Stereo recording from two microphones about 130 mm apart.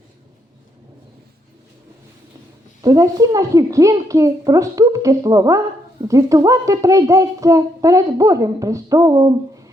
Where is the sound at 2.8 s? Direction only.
25° right (ahead or behind).